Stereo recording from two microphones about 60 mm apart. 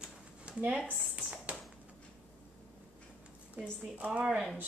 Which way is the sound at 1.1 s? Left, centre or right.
Centre.